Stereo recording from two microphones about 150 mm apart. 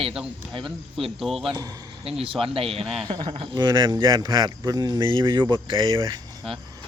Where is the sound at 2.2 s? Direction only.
35° right (ahead or behind).